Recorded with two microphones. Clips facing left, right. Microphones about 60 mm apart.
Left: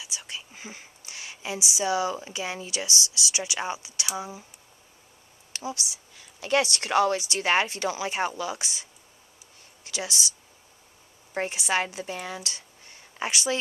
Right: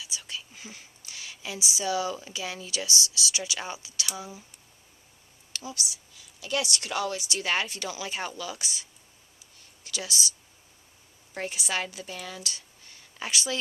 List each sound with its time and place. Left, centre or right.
0.0 s whispering: left
1.8 s speech: left
5.5 s speech: left
6.1 s speech: left
9.8 s speech: left
11.3 s speech: left